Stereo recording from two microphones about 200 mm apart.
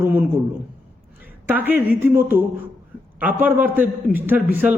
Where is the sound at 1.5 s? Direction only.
10° right (ahead or behind).